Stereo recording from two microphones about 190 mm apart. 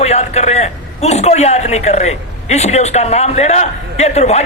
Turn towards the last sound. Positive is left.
turn(degrees=35)  # may be behind; listen again after turning